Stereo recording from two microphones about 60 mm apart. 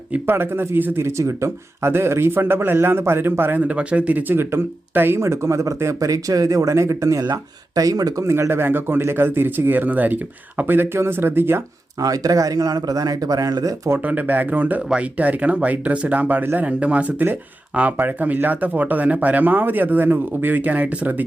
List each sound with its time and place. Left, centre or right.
0.3 s speech: right
3.7 s speech: right
8.2 s speech: right
10.7 s speech: right
11.9 s speech: right
14.0 s speech: right
16.6 s speech: right